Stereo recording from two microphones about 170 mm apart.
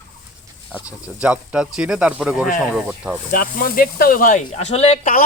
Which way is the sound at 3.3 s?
55° left (ahead or behind).